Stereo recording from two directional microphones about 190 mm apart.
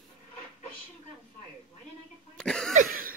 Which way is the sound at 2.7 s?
45° right (ahead or behind).